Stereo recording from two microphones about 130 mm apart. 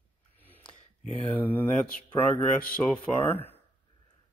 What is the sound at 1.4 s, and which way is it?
A man's voice, 15° left (ahead or behind).